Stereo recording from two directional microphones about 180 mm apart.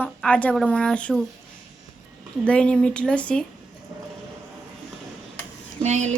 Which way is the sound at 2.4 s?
5° left (ahead or behind).